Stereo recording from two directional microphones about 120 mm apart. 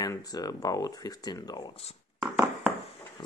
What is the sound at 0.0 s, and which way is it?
Speech, 30° left (ahead or behind).